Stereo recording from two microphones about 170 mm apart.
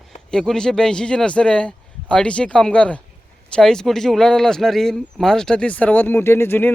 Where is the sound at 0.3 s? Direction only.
5° left (ahead or behind).